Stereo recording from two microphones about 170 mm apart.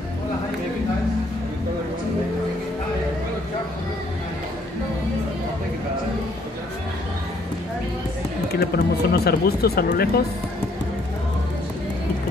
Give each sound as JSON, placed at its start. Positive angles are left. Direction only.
{"t": 8.5, "sound": "speech", "side_deg": 65}